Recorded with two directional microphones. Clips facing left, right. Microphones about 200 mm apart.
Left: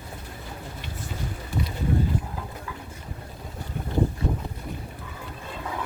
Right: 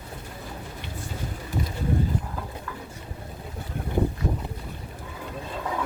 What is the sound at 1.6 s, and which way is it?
Boat, 45° right (ahead or behind).